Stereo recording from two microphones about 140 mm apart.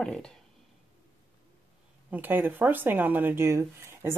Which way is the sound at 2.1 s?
15° right (ahead or behind).